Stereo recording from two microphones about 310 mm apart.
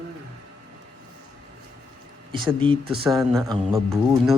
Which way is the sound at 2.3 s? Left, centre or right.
Centre.